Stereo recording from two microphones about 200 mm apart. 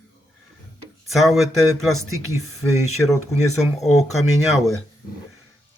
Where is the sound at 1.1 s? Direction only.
Centre (ahead or behind).